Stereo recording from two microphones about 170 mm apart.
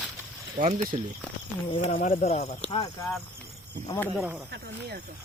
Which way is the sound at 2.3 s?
40° left (ahead or behind).